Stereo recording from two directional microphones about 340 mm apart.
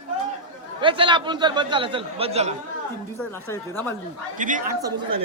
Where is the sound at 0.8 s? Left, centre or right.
Centre.